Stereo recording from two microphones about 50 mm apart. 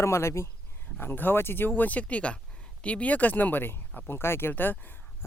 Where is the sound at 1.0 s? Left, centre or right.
Left.